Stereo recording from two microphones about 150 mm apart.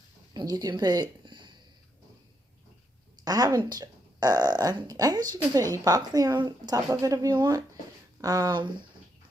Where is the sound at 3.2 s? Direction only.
25° right (ahead or behind).